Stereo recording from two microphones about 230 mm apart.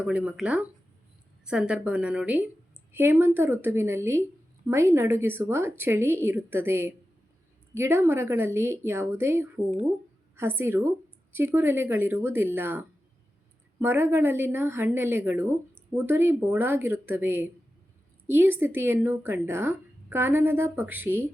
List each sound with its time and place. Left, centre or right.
0.0 s a woman's voice: centre